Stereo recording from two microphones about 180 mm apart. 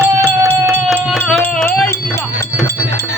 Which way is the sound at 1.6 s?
15° left (ahead or behind).